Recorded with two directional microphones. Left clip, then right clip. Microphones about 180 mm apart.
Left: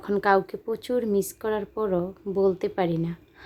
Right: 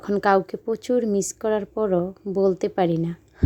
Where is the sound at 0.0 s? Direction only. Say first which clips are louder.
Right 2 dB; 25° right (ahead or behind).